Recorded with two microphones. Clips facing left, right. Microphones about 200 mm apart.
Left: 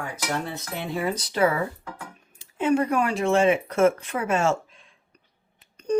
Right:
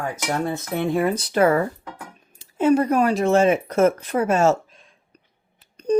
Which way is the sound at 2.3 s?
40° right (ahead or behind).